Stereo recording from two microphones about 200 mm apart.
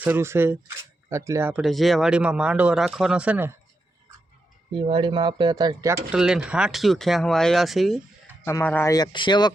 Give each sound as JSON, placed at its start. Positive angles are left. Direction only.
{"t": 0.0, "sound": "speech", "side_deg": -10}
{"t": 4.7, "sound": "speech", "side_deg": -25}
{"t": 6.1, "sound": "speech", "side_deg": -5}
{"t": 8.4, "sound": "speech", "side_deg": 10}